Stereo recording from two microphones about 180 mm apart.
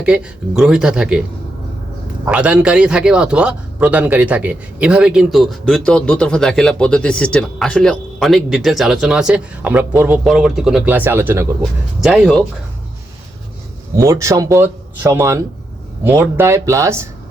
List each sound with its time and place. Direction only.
0.0 s a man's voice: 5° right (ahead or behind)
2.2 s a man's voice: 5° right (ahead or behind)
11.6 s a man's voice: centre (ahead or behind)
13.9 s speech: 15° right (ahead or behind)